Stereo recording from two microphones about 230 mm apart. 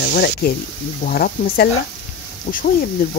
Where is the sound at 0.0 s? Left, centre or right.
Left.